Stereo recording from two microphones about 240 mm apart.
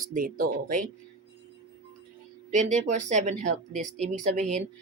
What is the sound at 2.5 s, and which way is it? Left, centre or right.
Speech, right.